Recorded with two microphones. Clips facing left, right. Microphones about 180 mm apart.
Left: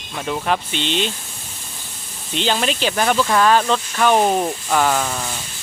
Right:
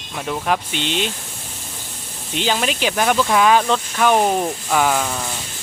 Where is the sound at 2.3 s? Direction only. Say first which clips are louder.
Even; 10° right (ahead or behind).